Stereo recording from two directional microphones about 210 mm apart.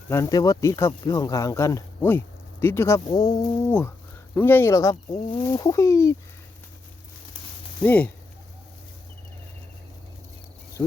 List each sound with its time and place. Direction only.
0.1 s speech: 15° left (ahead or behind)
7.8 s speech: 5° left (ahead or behind)
10.8 s speech: 20° left (ahead or behind)